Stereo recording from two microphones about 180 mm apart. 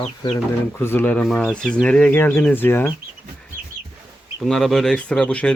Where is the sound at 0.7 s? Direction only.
10° left (ahead or behind).